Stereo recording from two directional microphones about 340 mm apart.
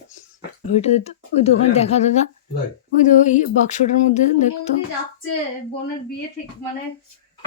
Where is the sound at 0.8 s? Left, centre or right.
Centre.